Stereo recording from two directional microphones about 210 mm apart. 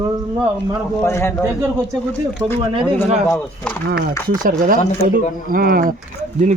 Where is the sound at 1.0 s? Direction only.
10° left (ahead or behind).